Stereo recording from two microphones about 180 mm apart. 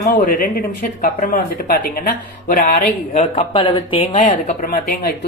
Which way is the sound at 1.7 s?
55° left (ahead or behind).